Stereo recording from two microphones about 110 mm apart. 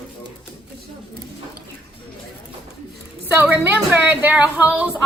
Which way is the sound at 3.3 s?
15° right (ahead or behind).